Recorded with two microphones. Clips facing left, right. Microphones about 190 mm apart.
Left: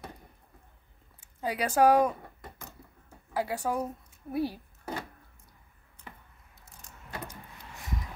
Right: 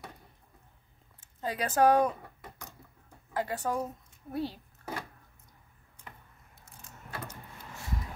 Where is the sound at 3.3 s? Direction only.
10° left (ahead or behind).